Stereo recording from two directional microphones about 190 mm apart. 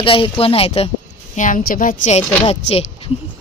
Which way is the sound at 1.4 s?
45° left (ahead or behind).